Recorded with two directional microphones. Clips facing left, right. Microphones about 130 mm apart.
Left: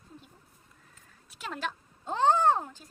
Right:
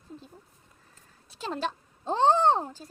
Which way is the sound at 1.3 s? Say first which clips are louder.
Right 4 dB; 30° right (ahead or behind).